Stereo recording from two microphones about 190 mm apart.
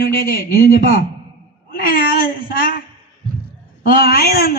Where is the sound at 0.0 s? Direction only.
50° left (ahead or behind).